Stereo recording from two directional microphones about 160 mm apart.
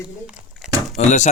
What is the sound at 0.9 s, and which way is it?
Speech, 45° left (ahead or behind).